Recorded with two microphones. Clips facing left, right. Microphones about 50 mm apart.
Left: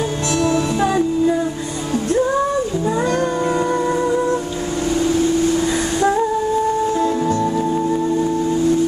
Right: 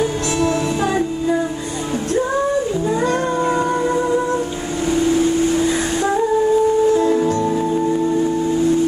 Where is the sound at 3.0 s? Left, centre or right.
Centre.